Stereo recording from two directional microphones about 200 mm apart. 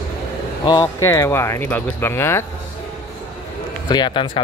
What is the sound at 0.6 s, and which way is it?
Speech, 15° left (ahead or behind).